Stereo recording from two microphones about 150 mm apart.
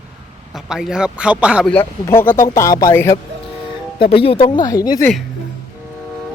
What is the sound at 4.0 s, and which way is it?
Speech, 40° left (ahead or behind).